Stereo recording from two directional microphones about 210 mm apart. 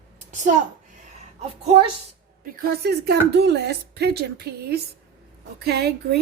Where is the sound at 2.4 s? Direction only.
45° right (ahead or behind).